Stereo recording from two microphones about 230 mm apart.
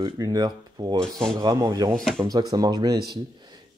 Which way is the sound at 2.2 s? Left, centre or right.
Centre.